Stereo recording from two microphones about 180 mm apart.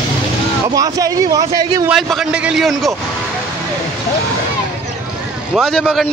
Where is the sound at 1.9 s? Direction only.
Centre (ahead or behind).